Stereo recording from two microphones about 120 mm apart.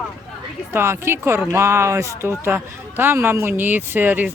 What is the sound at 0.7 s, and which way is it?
A man's voice, 20° right (ahead or behind).